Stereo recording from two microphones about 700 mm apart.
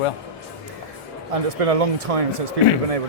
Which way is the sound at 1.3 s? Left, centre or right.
Right.